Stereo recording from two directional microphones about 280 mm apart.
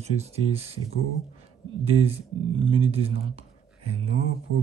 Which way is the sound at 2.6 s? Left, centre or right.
Centre.